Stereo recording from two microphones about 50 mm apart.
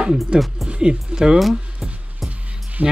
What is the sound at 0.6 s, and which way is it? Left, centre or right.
Speech, right.